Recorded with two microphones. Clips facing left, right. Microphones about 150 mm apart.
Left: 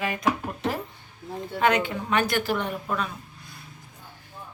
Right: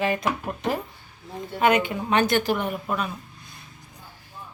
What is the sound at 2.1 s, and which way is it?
Speech, 25° right (ahead or behind).